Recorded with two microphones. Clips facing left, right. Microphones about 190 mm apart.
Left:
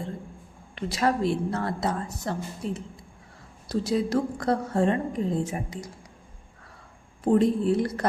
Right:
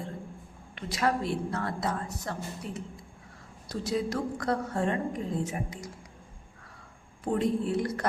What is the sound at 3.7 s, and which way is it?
A woman's voice, 30° left (ahead or behind).